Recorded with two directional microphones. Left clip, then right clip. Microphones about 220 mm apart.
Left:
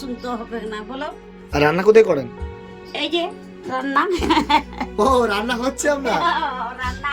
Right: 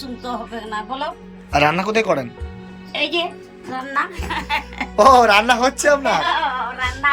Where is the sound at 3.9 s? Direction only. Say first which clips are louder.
Left 5 dB; 40° left (ahead or behind).